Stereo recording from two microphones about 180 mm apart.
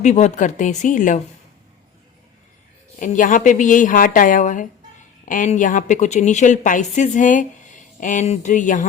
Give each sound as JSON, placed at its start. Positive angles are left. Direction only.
{"t": 0.0, "sound": "a woman's voice", "side_deg": 40}
{"t": 3.0, "sound": "a woman's voice", "side_deg": 45}